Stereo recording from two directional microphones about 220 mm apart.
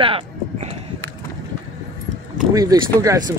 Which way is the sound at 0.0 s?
25° right (ahead or behind).